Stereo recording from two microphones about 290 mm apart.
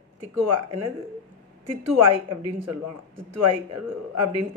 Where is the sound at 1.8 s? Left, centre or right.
Right.